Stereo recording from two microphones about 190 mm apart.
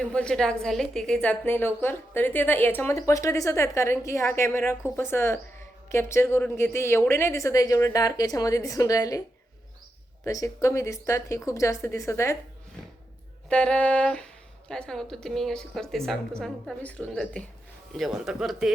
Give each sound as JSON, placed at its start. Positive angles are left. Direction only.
{"t": 0.0, "sound": "a woman's voice", "side_deg": 5}
{"t": 10.2, "sound": "a woman's voice", "side_deg": 15}
{"t": 13.5, "sound": "a woman's voice", "side_deg": 5}